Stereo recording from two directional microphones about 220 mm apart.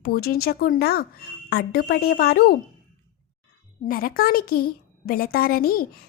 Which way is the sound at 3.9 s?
40° left (ahead or behind).